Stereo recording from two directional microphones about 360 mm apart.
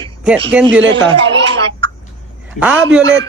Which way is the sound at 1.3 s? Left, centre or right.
Right.